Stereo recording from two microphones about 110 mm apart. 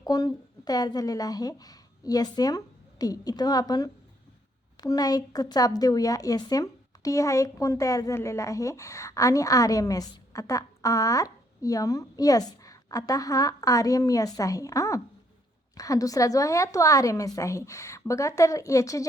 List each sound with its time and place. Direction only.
0.0 s a woman's voice: 35° left (ahead or behind)